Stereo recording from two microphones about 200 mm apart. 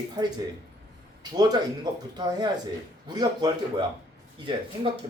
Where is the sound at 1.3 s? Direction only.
20° right (ahead or behind).